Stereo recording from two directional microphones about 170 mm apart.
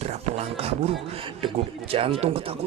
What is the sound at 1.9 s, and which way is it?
Speech, 35° right (ahead or behind).